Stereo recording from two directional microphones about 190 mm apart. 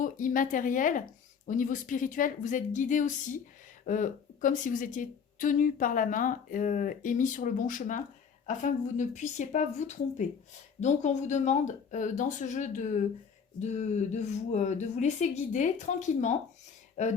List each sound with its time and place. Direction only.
0.0 s a woman's voice: 45° left (ahead or behind)